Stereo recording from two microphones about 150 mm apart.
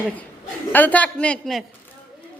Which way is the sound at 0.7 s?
10° left (ahead or behind).